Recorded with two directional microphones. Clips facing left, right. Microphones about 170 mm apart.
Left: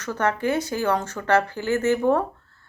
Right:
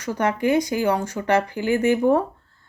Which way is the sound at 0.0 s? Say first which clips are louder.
Right 2 dB; 15° right (ahead or behind).